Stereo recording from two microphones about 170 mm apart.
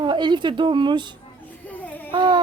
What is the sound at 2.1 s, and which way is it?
Speech, 25° right (ahead or behind).